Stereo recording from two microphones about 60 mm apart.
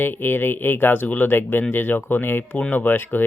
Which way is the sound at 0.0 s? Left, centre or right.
Left.